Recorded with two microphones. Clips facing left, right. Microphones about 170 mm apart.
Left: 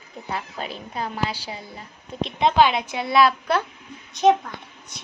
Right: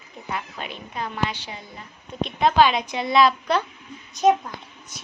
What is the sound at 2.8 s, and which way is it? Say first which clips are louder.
Speech: even; 5° left (ahead or behind).